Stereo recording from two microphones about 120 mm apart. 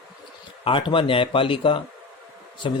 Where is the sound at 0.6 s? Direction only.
45° left (ahead or behind).